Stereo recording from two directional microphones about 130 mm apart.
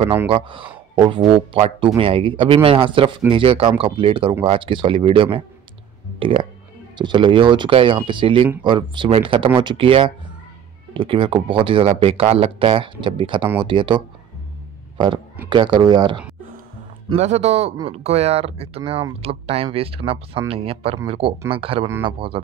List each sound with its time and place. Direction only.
0.3 s speech: 40° right (ahead or behind)
15.5 s speech: 35° right (ahead or behind)
17.1 s speech: 55° right (ahead or behind)